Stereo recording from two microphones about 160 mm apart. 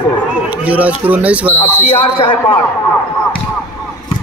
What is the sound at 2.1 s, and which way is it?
Speech, 35° left (ahead or behind).